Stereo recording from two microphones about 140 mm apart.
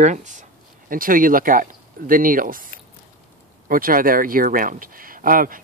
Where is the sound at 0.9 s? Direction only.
80° right.